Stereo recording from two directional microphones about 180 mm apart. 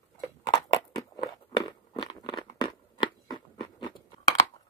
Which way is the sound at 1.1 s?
25° left (ahead or behind).